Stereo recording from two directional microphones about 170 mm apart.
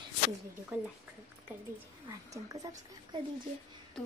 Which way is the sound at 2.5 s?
20° right (ahead or behind).